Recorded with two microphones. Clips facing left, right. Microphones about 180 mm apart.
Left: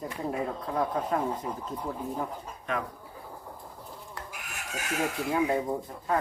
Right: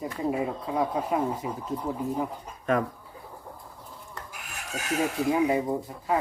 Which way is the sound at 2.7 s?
45° right (ahead or behind).